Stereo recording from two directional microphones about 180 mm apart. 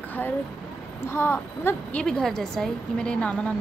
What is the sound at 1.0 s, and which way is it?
A woman's voice, 10° left (ahead or behind).